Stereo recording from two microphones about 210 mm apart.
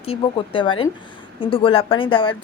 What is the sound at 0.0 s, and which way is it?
A woman's voice, 25° left (ahead or behind).